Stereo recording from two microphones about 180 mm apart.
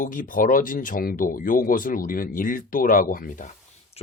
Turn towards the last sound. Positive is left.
turn(degrees=50)  # may be behind; listen again after turning